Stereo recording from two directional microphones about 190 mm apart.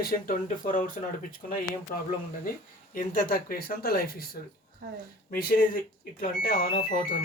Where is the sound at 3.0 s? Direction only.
45° left (ahead or behind).